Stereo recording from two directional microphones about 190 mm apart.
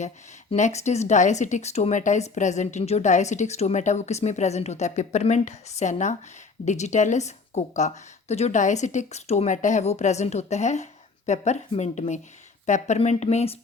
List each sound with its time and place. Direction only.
0.5 s speech: 35° left (ahead or behind)